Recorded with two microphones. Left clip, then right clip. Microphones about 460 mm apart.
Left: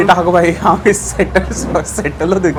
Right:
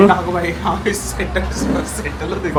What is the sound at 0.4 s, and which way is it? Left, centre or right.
A woman's voice, left.